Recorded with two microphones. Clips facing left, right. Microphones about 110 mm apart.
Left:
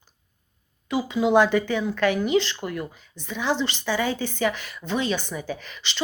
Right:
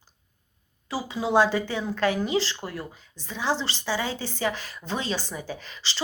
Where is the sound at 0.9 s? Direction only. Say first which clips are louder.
Left 6 dB; 30° right (ahead or behind).